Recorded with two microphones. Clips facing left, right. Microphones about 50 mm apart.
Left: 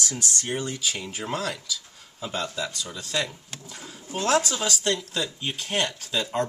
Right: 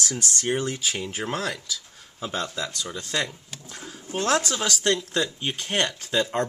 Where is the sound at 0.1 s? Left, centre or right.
Right.